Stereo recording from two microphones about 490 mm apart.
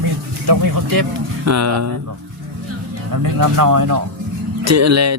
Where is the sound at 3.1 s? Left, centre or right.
Right.